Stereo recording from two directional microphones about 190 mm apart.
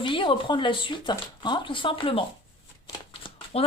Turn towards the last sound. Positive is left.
turn(degrees=30)  # may be behind; listen again after turning